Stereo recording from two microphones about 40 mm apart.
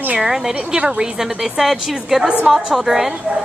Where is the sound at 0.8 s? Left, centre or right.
Right.